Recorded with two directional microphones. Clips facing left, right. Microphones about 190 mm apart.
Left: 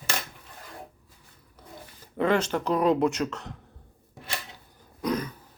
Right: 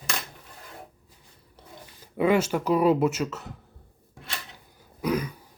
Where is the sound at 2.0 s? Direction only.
10° right (ahead or behind).